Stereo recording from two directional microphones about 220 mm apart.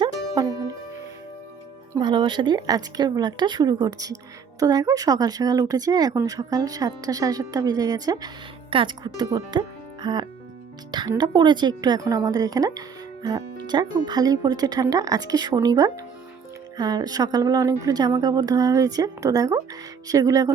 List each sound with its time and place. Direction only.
0.0 s music: 15° right (ahead or behind)
1.9 s a woman's voice: 20° right (ahead or behind)